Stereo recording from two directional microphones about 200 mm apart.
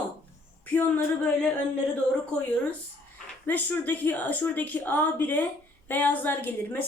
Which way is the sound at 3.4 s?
10° left (ahead or behind).